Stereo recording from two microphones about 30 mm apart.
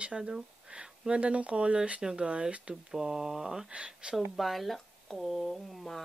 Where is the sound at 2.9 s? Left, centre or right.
Centre.